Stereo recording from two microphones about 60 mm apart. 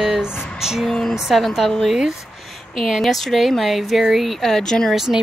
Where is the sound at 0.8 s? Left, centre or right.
Centre.